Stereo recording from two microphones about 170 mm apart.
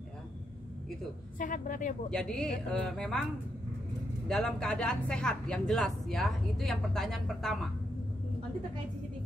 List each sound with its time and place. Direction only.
1.4 s a woman's voice: 50° left (ahead or behind)
2.0 s speech: 5° left (ahead or behind)
4.3 s speech: 5° left (ahead or behind)